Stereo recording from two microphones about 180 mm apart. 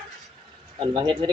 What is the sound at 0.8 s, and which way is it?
Speech, 25° right (ahead or behind).